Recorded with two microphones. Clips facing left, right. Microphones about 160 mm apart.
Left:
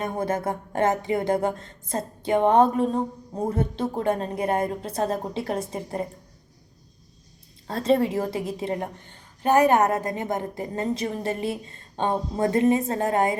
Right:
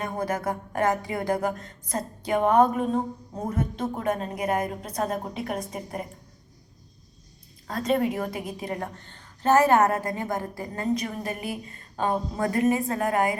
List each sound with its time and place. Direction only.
0.0 s a woman's voice: 25° left (ahead or behind)
7.7 s a woman's voice: 30° left (ahead or behind)
9.0 s a woman's voice: 15° left (ahead or behind)